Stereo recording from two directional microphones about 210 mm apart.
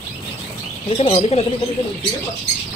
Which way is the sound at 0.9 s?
25° left (ahead or behind).